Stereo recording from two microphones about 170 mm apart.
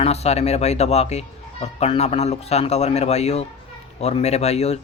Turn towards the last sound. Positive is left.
turn(degrees=40)  # may be behind; listen again after turning